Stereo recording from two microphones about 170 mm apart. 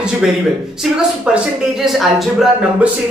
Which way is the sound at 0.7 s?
5° right (ahead or behind).